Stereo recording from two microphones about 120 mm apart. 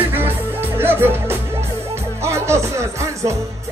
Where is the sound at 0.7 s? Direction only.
20° right (ahead or behind).